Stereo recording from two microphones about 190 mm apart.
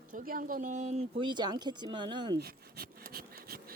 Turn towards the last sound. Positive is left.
turn(degrees=-50)  # may be behind; listen again after turning